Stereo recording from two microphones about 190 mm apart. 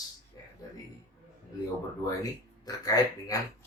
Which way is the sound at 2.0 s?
20° left (ahead or behind).